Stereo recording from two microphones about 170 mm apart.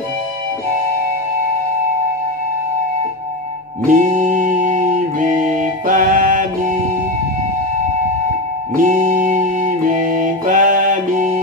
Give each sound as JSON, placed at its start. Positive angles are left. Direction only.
{"t": 3.8, "sound": "music", "side_deg": -50}
{"t": 8.7, "sound": "music", "side_deg": -50}